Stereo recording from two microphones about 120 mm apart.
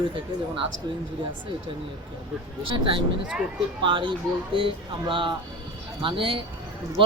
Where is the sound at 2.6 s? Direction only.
45° right (ahead or behind).